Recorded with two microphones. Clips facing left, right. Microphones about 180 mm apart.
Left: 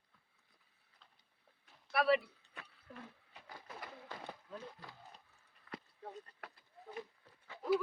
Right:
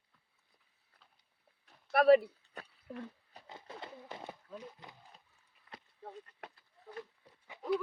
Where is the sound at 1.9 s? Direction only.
45° right (ahead or behind).